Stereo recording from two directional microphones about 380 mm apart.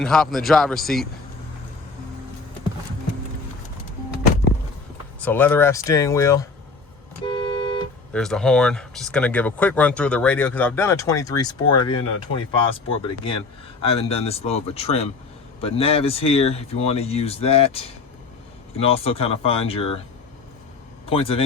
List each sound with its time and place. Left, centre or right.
0.0 s speech: centre
5.2 s speech: centre
7.3 s car alarm: centre
8.1 s speech: centre
18.8 s speech: centre
21.1 s speech: centre